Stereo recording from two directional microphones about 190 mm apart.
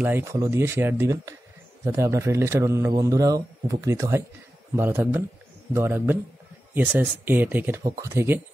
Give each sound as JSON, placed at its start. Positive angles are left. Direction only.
{"t": 0.0, "sound": "speech", "side_deg": -10}